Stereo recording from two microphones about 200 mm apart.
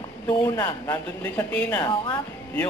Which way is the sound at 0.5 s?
10° left (ahead or behind).